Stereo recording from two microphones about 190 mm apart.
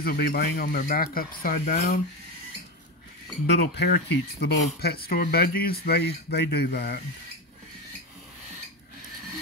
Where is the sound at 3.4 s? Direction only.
60° left (ahead or behind).